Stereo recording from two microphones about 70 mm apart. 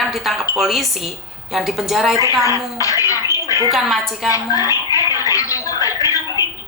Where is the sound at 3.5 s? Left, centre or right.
Left.